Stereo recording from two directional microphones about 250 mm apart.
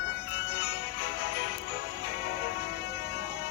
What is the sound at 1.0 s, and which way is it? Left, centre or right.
Music, left.